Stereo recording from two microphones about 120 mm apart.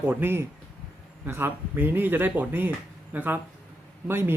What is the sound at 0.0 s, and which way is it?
Speech, 15° right (ahead or behind).